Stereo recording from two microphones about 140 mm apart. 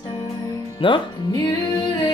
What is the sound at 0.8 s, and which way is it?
Speech, 35° left (ahead or behind).